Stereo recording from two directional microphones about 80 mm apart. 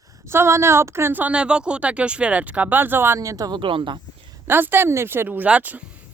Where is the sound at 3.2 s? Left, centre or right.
Right.